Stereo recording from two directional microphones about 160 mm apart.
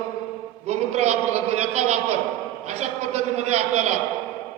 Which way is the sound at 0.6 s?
45° right (ahead or behind).